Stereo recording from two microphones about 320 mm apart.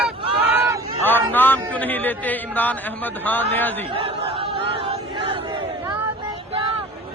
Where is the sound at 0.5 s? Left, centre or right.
Centre.